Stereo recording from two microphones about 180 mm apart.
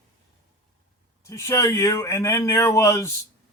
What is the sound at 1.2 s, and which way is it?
A man's voice, 15° left (ahead or behind).